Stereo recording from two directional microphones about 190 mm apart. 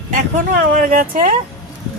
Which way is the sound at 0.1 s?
45° right (ahead or behind).